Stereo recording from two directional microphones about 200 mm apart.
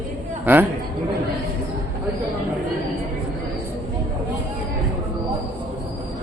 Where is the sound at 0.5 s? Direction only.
10° right (ahead or behind).